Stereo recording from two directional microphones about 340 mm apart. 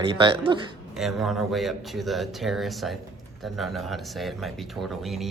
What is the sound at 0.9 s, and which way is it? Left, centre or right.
Speech, centre.